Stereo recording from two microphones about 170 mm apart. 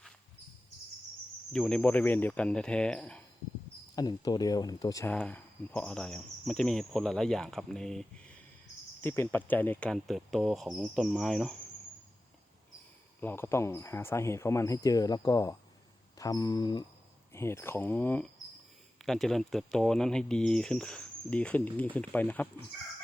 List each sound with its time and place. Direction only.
1.5 s speech: 5° left (ahead or behind)
3.9 s speech: 25° left (ahead or behind)
5.0 s speech: 10° left (ahead or behind)
9.0 s speech: 15° left (ahead or behind)
13.2 s speech: 15° left (ahead or behind)